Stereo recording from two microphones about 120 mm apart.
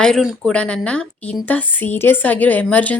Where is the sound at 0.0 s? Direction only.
5° left (ahead or behind).